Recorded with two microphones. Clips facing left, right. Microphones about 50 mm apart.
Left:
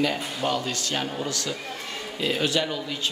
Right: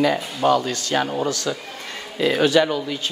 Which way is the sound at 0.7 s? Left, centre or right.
Right.